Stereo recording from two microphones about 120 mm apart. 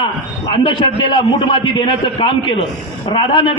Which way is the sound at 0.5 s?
45° left (ahead or behind).